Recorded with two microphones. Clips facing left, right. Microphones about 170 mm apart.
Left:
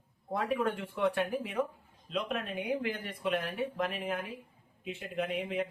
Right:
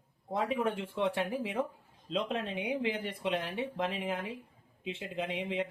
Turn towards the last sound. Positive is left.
turn(degrees=-25)  # may be behind; listen again after turning